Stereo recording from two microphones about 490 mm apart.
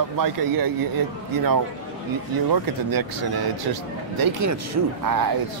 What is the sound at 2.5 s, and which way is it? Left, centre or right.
Speech, right.